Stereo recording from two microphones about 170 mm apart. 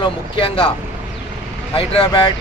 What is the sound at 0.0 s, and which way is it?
Speech, 30° left (ahead or behind).